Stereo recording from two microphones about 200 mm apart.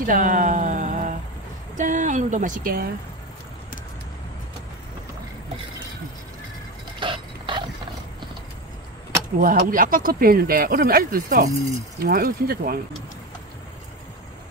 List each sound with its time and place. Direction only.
0.0 s a sound: 40° right (ahead or behind)
1.8 s speech: 40° right (ahead or behind)
7.0 s dog: 25° right (ahead or behind)
9.4 s speech: 45° right (ahead or behind)